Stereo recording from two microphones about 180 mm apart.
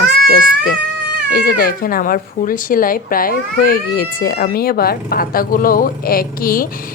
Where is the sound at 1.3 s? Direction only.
55° left (ahead or behind).